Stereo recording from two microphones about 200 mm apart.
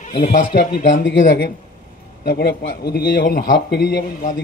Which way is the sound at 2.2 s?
50° left (ahead or behind).